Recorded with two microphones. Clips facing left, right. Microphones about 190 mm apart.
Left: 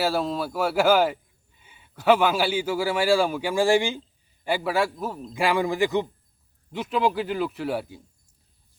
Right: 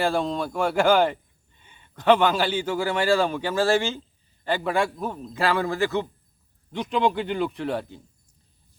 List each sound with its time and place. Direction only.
0.0 s speech: 5° left (ahead or behind)
6.7 s speech: 5° left (ahead or behind)